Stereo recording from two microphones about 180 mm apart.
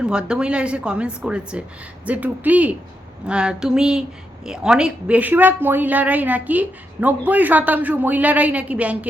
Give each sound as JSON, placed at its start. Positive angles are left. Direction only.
{"t": 0.0, "sound": "a woman's voice", "side_deg": -5}